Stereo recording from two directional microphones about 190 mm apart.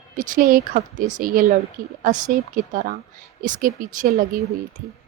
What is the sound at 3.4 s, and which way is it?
Speech, 45° right (ahead or behind).